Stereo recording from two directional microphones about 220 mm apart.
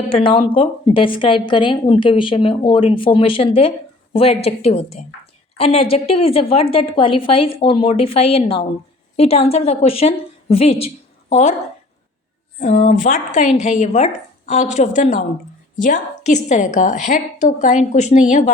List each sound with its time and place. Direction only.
0.1 s a woman's voice: 25° left (ahead or behind)
12.5 s a woman's voice: 35° left (ahead or behind)